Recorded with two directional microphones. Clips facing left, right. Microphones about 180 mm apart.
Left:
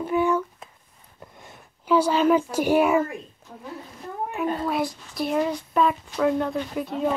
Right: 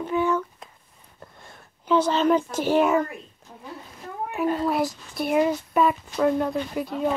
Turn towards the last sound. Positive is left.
turn(degrees=0)  # may be behind; listen again after turning